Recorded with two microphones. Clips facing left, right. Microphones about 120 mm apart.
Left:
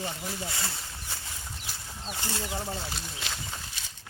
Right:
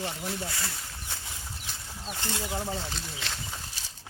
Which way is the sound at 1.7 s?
5° left (ahead or behind).